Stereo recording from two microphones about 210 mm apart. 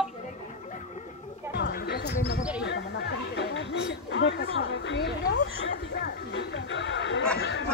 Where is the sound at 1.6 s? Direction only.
45° left (ahead or behind).